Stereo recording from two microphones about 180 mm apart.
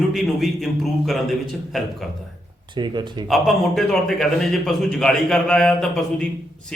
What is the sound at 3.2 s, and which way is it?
Speech, centre (ahead or behind).